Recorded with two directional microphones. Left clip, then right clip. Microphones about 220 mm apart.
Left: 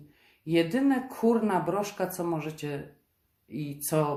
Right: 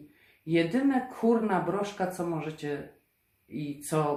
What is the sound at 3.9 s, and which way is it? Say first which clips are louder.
Speech: left 1 dB; 40° left (ahead or behind).